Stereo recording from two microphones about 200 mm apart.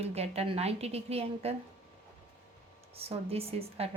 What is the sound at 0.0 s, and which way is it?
A woman's voice, 30° right (ahead or behind).